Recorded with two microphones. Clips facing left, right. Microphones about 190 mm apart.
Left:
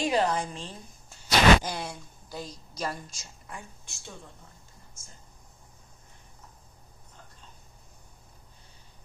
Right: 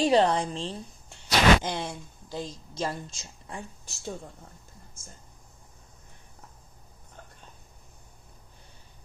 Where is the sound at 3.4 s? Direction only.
35° right (ahead or behind).